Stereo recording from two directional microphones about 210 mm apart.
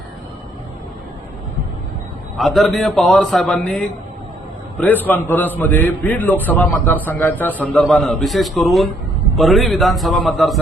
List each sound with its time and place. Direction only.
2.3 s a man's voice: centre (ahead or behind)